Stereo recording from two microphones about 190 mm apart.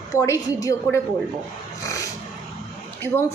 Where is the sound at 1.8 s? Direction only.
15° left (ahead or behind).